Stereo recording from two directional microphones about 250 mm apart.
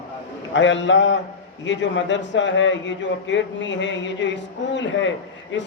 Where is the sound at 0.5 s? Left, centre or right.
Left.